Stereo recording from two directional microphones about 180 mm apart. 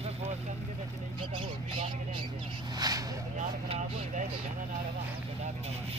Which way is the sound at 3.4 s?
45° right (ahead or behind).